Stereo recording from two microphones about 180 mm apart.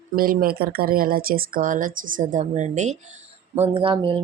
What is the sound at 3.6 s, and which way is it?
Speech, 30° right (ahead or behind).